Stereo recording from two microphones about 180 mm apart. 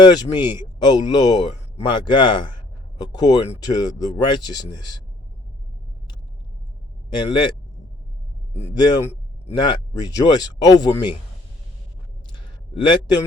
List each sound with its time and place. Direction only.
0.0 s speech: 25° left (ahead or behind)
7.1 s speech: 25° left (ahead or behind)
8.7 s a man's voice: 20° left (ahead or behind)
12.3 s a sound: 25° left (ahead or behind)